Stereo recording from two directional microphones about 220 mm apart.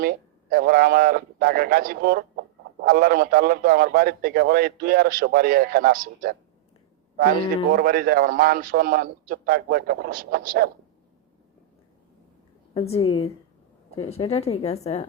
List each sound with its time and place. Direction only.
0.0 s speech: 40° right (ahead or behind)
7.7 s a man's voice: 40° right (ahead or behind)
12.7 s speech: 25° left (ahead or behind)